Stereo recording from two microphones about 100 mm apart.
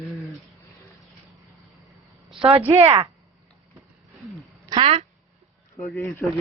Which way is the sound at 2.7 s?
30° right (ahead or behind).